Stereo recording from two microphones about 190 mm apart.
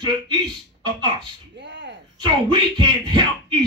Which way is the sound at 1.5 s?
70° right (ahead or behind).